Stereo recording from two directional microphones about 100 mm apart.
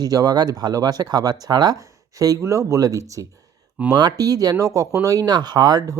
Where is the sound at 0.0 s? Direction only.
40° right (ahead or behind).